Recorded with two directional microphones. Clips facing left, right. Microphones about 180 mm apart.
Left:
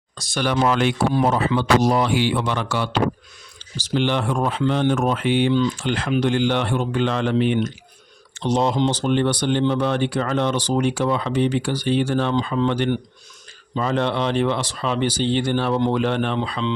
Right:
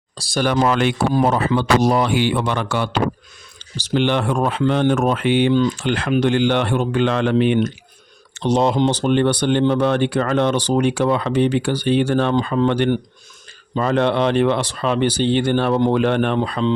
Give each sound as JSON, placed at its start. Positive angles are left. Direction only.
{"t": 0.2, "sound": "speech", "side_deg": -35}
{"t": 0.4, "sound": "speech", "side_deg": -50}
{"t": 5.7, "sound": "speech", "side_deg": -65}